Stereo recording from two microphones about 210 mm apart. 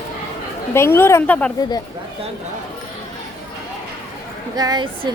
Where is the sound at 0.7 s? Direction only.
10° left (ahead or behind).